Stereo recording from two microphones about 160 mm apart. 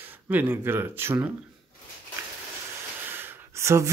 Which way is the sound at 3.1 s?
15° right (ahead or behind).